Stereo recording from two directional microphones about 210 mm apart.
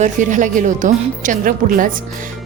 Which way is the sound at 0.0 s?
35° right (ahead or behind).